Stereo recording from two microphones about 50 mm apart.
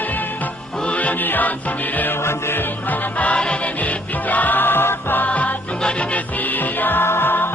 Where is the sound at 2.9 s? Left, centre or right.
Left.